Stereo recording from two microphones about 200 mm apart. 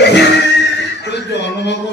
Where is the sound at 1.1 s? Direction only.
60° left (ahead or behind).